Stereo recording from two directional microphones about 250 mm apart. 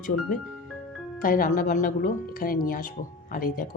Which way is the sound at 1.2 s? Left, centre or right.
Left.